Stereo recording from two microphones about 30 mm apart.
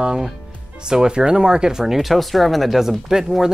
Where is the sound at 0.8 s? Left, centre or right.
Right.